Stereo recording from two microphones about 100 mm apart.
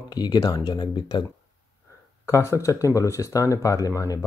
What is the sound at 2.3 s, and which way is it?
Speech, 30° left (ahead or behind).